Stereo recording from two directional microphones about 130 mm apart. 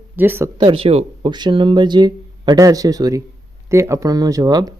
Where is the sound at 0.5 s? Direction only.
40° right (ahead or behind).